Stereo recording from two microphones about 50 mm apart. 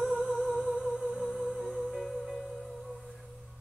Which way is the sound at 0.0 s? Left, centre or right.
Centre.